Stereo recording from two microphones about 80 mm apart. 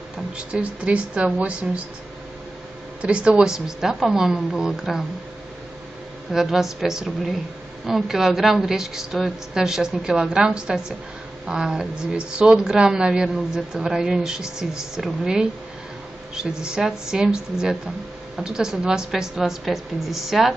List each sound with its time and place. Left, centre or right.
0.4 s speech: centre
3.0 s speech: centre
6.3 s a woman's voice: centre